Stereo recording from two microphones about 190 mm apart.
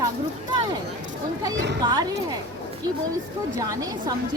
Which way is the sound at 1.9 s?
20° right (ahead or behind).